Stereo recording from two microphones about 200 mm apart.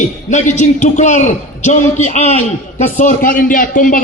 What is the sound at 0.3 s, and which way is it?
A man's voice, 35° left (ahead or behind).